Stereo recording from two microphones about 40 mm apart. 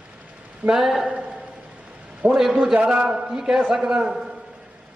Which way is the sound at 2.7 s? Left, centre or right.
Right.